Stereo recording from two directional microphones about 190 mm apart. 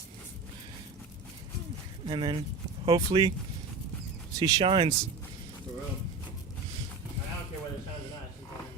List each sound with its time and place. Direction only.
2.0 s speech: 25° right (ahead or behind)
4.4 s speech: 20° right (ahead or behind)